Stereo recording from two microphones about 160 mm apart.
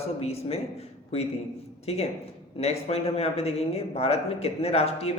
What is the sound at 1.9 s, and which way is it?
A man's voice, 40° left (ahead or behind).